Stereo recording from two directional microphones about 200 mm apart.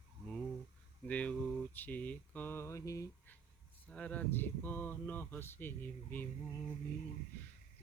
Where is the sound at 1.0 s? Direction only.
5° left (ahead or behind).